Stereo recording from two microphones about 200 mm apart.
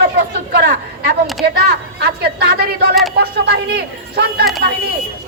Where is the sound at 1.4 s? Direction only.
55° right (ahead or behind).